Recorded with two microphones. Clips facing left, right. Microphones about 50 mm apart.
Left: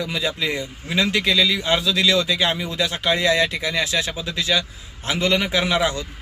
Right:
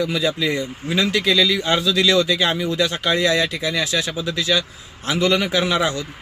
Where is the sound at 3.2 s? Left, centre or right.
Left.